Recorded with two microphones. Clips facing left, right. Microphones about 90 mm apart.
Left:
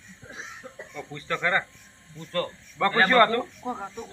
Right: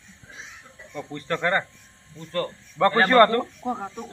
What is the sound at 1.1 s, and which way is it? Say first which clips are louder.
A man's voice: right 2 dB; 40° right (ahead or behind).